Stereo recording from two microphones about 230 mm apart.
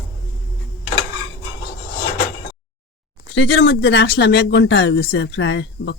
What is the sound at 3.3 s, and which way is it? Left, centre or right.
Speech, left.